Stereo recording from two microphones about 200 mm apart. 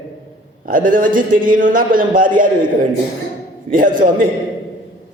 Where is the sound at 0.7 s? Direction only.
45° right (ahead or behind).